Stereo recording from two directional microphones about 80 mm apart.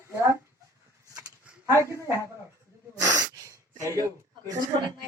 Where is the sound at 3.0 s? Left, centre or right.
Right.